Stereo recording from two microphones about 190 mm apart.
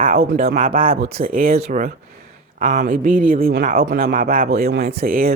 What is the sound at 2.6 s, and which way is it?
Speech, 45° right (ahead or behind).